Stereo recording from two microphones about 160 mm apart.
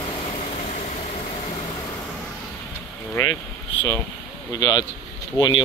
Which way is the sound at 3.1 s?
15° left (ahead or behind).